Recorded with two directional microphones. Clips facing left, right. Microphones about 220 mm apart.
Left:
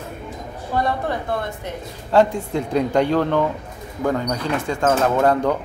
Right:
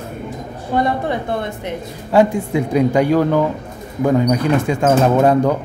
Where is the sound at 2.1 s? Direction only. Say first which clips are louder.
Right 3 dB; 10° right (ahead or behind).